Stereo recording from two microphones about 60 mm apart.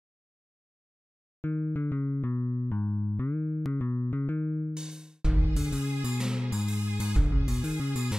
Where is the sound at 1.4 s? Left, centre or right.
Left.